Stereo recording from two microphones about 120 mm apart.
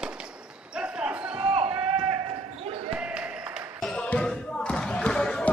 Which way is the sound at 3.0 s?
10° right (ahead or behind).